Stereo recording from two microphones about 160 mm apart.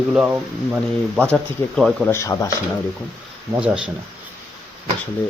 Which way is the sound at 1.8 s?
Centre (ahead or behind).